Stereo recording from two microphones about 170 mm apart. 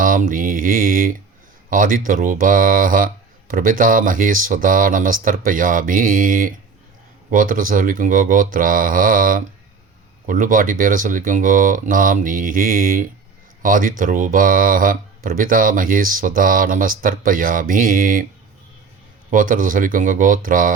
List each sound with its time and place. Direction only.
0.0 s mantra: 55° right (ahead or behind)
1.7 s speech: 50° right (ahead or behind)
19.3 s speech: 50° right (ahead or behind)